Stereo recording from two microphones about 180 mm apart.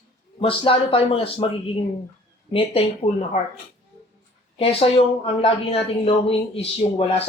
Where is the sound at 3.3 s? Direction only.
45° left (ahead or behind).